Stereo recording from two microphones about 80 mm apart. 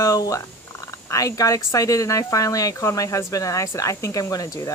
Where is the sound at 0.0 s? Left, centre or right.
Left.